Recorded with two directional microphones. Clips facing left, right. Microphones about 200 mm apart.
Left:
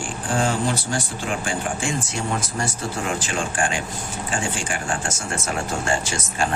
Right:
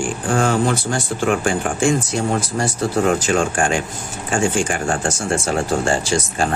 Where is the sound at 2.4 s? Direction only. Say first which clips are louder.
Right 6 dB; 35° right (ahead or behind).